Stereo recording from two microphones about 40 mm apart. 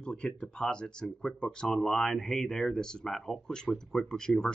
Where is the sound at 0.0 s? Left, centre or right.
Left.